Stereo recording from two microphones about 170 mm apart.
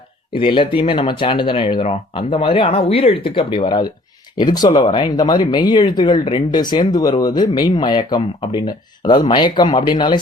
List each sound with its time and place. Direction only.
0.3 s speech: 30° left (ahead or behind)